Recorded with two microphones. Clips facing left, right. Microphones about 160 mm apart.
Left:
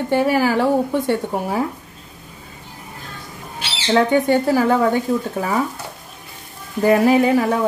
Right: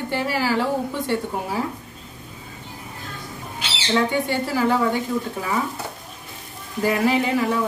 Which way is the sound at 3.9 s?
50° left (ahead or behind).